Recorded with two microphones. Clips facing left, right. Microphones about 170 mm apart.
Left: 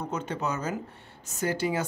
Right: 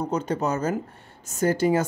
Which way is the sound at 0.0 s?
40° right (ahead or behind).